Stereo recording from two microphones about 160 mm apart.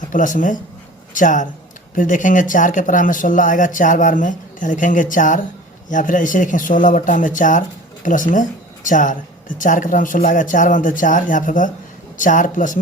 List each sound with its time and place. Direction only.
0.1 s speech: 55° left (ahead or behind)